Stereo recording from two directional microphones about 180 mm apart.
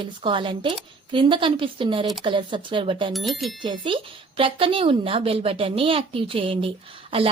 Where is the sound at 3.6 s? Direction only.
25° right (ahead or behind).